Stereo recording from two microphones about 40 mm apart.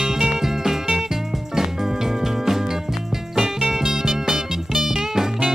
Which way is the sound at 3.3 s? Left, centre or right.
Centre.